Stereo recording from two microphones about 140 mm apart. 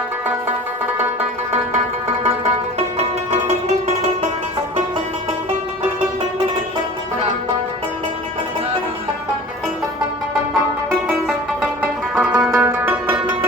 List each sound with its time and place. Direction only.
2.7 s music: 50° right (ahead or behind)
11.3 s music: 5° right (ahead or behind)
12.7 s zither: 15° right (ahead or behind)